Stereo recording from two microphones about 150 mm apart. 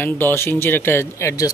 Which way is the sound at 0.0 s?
15° left (ahead or behind).